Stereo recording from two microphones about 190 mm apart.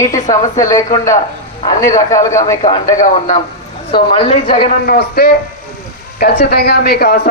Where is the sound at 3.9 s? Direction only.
30° left (ahead or behind).